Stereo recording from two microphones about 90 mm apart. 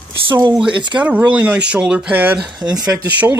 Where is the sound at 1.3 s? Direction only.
15° right (ahead or behind).